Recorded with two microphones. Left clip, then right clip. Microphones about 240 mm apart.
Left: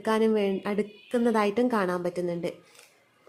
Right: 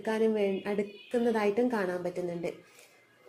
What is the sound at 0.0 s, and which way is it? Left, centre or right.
Speech, left.